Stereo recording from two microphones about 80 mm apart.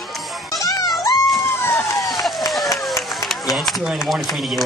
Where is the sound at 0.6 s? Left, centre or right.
Left.